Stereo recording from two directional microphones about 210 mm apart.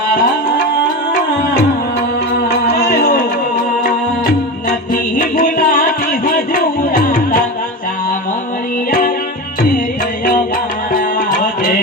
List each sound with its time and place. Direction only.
2.6 s music: 50° left (ahead or behind)
8.9 s music: 45° left (ahead or behind)